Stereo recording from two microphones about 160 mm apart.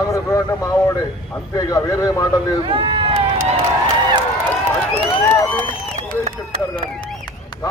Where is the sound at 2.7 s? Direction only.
30° right (ahead or behind).